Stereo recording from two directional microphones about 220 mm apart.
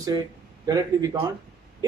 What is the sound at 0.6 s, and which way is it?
Speech, 15° right (ahead or behind).